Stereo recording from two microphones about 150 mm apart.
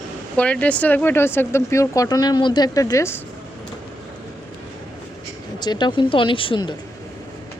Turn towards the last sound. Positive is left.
turn(degrees=35)  # may be behind; listen again after turning